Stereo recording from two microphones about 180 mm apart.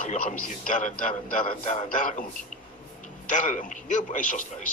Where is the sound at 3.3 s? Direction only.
45° left (ahead or behind).